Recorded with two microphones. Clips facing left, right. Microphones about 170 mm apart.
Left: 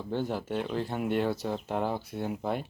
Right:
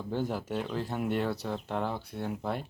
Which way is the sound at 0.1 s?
Centre (ahead or behind).